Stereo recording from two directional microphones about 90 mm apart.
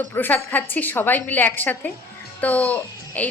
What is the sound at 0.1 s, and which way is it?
A woman's voice, 25° left (ahead or behind).